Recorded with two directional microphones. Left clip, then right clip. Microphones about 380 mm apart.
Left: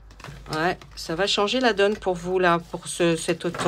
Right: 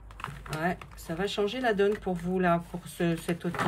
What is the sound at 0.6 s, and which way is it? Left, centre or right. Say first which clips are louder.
Speech: left 7 dB; centre.